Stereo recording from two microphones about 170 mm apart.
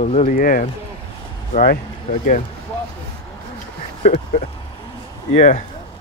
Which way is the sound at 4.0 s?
35° left (ahead or behind).